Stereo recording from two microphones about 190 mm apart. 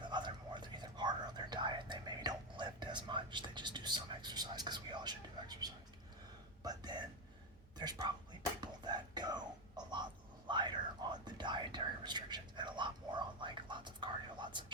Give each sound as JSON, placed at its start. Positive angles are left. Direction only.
{"t": 0.0, "sound": "whispering", "side_deg": -25}
{"t": 6.6, "sound": "a sound", "side_deg": -20}
{"t": 7.8, "sound": "whispering", "side_deg": -20}